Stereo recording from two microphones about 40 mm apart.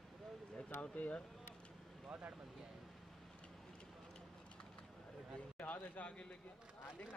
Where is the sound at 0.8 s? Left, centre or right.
Left.